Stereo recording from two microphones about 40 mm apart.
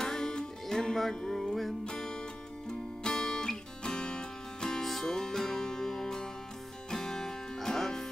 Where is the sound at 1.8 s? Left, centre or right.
Centre.